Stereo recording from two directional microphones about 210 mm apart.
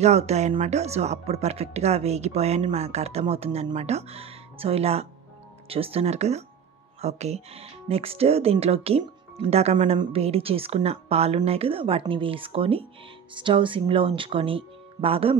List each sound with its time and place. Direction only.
0.0 s speech: 30° right (ahead or behind)